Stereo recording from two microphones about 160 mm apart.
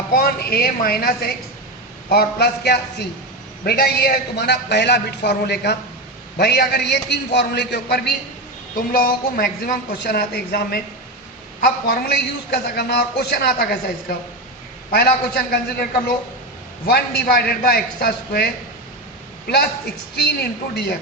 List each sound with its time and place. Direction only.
0.1 s a man's voice: 70° left (ahead or behind)
2.0 s a man's voice: 80° left
3.6 s a man's voice: 75° left (ahead or behind)
8.9 s a woman's voice: 60° left (ahead or behind)
11.9 s a man's voice: 80° left
20.2 s a man's voice: 90° left